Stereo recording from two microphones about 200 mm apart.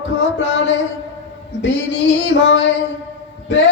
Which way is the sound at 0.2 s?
65° left (ahead or behind).